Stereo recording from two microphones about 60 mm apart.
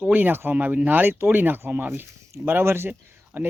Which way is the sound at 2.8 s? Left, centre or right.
Right.